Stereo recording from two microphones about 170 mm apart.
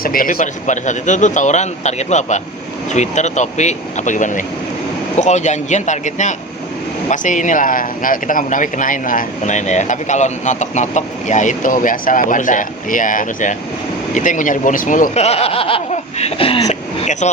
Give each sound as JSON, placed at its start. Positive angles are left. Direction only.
{"t": 0.0, "sound": "speech", "side_deg": 55}